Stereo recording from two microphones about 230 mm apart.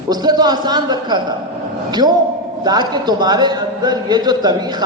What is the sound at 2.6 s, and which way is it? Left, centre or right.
A man's voice, centre.